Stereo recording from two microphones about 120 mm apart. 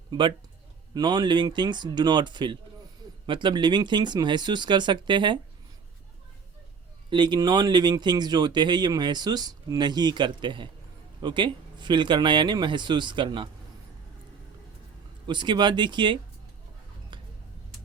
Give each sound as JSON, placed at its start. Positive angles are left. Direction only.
{"t": 0.1, "sound": "a man's voice", "side_deg": -40}
{"t": 7.1, "sound": "speech", "side_deg": -40}
{"t": 15.3, "sound": "speech", "side_deg": -40}
{"t": 17.1, "sound": "a sound", "side_deg": -45}